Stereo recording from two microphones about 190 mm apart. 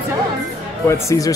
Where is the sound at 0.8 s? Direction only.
15° left (ahead or behind).